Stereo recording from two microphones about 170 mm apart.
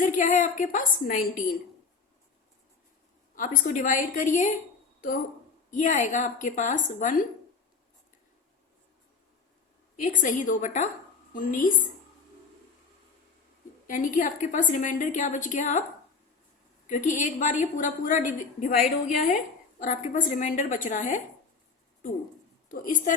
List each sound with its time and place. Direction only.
0.0 s a woman's voice: 50° left (ahead or behind)
3.3 s a woman's voice: 50° left (ahead or behind)
5.7 s a woman's voice: 45° left (ahead or behind)
10.0 s a woman's voice: 50° left (ahead or behind)
13.8 s a woman's voice: 50° left (ahead or behind)
16.8 s a woman's voice: 45° left (ahead or behind)
22.7 s a woman's voice: 50° left (ahead or behind)